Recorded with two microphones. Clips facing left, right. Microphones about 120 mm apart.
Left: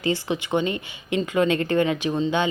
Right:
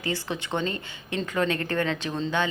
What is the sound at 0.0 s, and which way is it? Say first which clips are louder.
Speech: left 6 dB; 15° left (ahead or behind).